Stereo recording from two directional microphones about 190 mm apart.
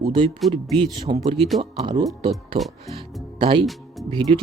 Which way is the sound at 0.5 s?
30° right (ahead or behind).